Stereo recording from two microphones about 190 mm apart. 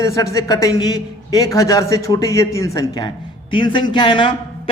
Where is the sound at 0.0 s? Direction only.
15° left (ahead or behind).